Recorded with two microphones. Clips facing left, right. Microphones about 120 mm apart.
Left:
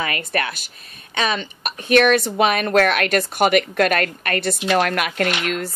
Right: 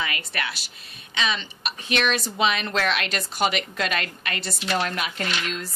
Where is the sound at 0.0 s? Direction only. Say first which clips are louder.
Left 6 dB; 45° left (ahead or behind).